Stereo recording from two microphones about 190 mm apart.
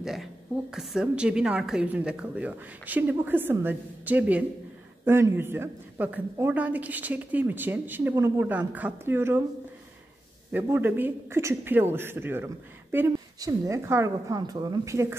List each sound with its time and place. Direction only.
0.0 s a woman's voice: centre (ahead or behind)
10.5 s a woman's voice: 10° right (ahead or behind)